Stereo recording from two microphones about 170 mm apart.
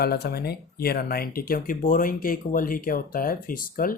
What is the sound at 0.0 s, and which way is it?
Speech, 65° left (ahead or behind).